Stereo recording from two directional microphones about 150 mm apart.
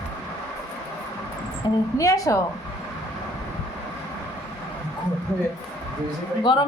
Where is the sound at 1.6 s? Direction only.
30° left (ahead or behind).